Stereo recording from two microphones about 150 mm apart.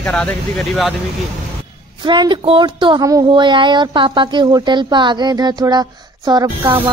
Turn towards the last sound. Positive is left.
turn(degrees=-25)  # may be behind; listen again after turning